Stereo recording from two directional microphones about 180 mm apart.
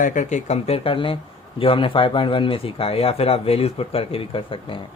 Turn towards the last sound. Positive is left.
turn(degrees=30)  # may be behind; listen again after turning